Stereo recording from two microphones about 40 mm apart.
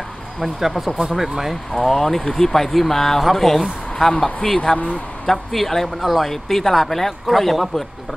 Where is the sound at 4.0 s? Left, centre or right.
Centre.